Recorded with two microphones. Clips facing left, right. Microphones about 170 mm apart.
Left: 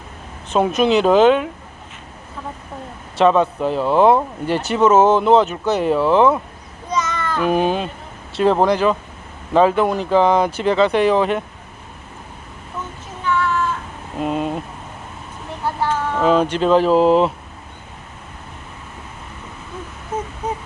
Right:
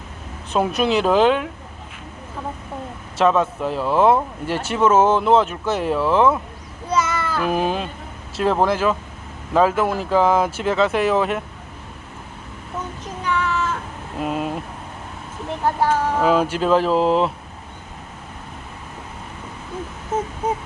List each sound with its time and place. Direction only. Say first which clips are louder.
0.5 s speech: left 3 dB; centre (ahead or behind)
3.2 s speech: left 3 dB; centre (ahead or behind)
6.9 s child singing: right 1 dB; 10° right (ahead or behind)
8.4 s speech: left 3 dB; centre (ahead or behind)
14.2 s speech: left 3 dB; 5° right (ahead or behind)
15.6 s a sound: right 2 dB; 45° right (ahead or behind)
16.1 s speech: left 2 dB; 5° right (ahead or behind)